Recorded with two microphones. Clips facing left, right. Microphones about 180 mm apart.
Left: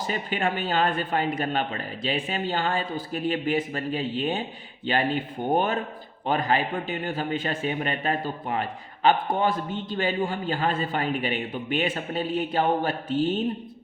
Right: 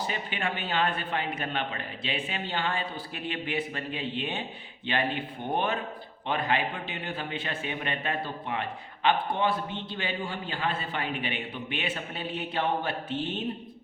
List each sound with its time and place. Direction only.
0.1 s speech: 40° left (ahead or behind)